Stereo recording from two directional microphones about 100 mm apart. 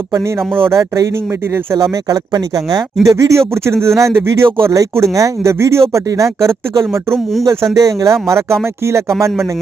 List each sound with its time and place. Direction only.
0.1 s speech: 25° right (ahead or behind)